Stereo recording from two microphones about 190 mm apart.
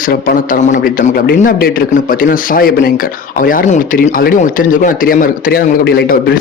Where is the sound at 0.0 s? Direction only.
45° left (ahead or behind).